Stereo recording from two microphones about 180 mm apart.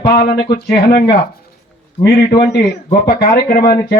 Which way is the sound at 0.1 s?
60° left (ahead or behind).